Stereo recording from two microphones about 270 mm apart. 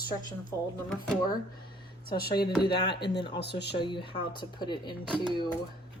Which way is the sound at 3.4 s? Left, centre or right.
Left.